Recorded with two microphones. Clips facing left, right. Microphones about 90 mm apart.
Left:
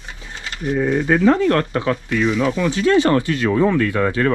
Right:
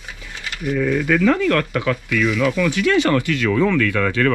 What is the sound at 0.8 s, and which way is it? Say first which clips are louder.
Speech: left 1 dB; 30° left (ahead or behind).